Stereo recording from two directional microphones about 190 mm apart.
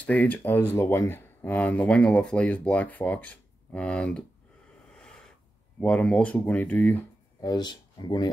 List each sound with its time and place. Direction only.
0.0 s speech: 5° left (ahead or behind)
4.9 s snort: 5° left (ahead or behind)
5.8 s speech: 5° left (ahead or behind)
7.4 s speech: 20° left (ahead or behind)